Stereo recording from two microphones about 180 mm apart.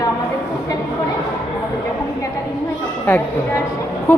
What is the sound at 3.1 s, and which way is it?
Speech, 10° left (ahead or behind).